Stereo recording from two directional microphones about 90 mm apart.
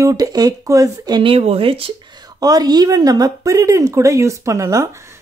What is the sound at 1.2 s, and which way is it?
Speech, 85° right.